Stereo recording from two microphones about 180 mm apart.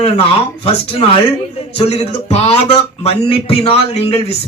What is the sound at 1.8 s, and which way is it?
Speech, 35° left (ahead or behind).